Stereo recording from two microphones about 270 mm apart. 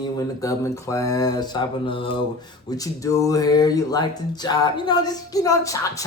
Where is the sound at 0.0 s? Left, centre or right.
Centre.